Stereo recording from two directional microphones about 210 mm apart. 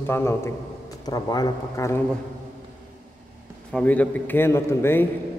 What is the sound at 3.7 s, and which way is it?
A man's voice, 5° left (ahead or behind).